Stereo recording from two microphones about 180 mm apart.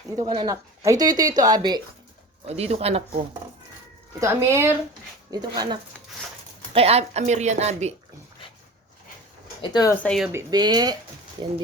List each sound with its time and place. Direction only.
0.2 s speech: 20° right (ahead or behind)
2.5 s a woman's voice: 35° right (ahead or behind)
4.2 s a woman's voice: 15° right (ahead or behind)
6.7 s a woman's voice: 35° right (ahead or behind)
9.6 s speech: 20° left (ahead or behind)
9.9 s speech: 5° left (ahead or behind)
10.3 s speech: 20° right (ahead or behind)